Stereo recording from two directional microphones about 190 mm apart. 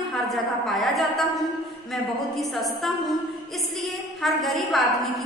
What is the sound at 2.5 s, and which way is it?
A woman's voice, centre (ahead or behind).